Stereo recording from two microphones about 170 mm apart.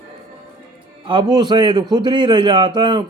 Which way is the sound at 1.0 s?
25° right (ahead or behind).